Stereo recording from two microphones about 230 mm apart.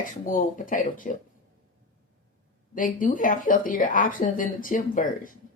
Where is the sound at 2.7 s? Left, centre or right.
Left.